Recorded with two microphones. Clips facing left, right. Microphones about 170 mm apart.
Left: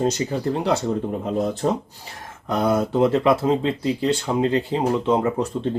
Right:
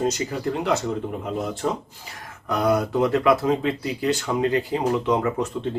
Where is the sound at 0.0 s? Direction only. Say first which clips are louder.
Left 2 dB; 30° left (ahead or behind).